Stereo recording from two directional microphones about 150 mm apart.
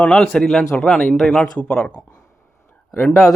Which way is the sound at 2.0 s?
15° left (ahead or behind).